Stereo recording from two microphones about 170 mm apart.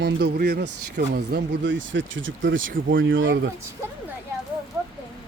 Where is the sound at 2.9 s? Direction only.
90° right.